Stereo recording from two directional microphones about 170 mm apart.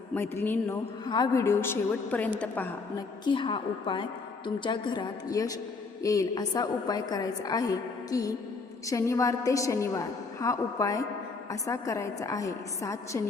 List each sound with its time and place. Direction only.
0.1 s a woman's voice: 10° left (ahead or behind)
1.0 s a woman's voice: 25° left (ahead or behind); by 3.0 s 10° left (ahead or behind)
3.2 s a woman's voice: 30° left (ahead or behind)